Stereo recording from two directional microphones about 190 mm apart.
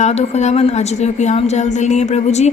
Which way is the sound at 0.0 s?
35° left (ahead or behind).